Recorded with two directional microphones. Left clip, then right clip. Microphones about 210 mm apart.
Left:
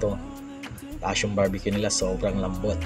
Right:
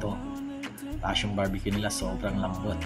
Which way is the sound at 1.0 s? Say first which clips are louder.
Left 5 dB; 20° left (ahead or behind).